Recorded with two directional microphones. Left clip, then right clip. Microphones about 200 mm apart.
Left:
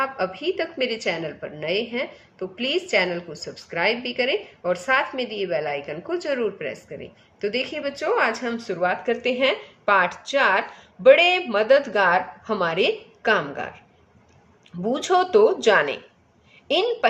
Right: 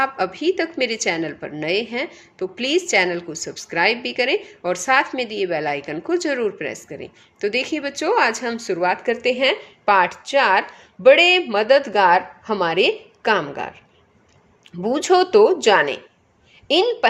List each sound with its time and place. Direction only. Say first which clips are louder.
0.0 s a woman's voice: right 4 dB; 45° right (ahead or behind)
14.8 s a woman's voice: right 4 dB; 35° right (ahead or behind)